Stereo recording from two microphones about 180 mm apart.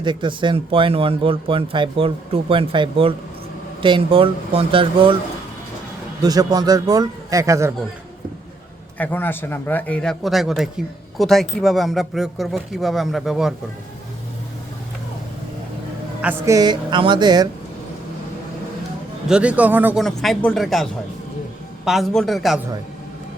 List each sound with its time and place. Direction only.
0.0 s speech: 25° right (ahead or behind)
6.2 s speech: 20° right (ahead or behind)
9.0 s a man's voice: 10° left (ahead or behind)
16.2 s speech: 20° right (ahead or behind)
19.3 s a man's voice: 5° right (ahead or behind)
20.0 s speech: centre (ahead or behind)
21.8 s speech: centre (ahead or behind)